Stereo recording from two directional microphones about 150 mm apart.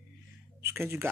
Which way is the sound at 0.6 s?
15° right (ahead or behind).